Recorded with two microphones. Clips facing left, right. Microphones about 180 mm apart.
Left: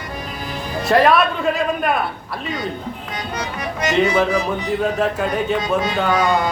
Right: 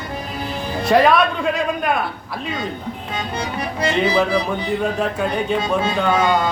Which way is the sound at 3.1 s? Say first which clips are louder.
Right 3 dB; 30° right (ahead or behind).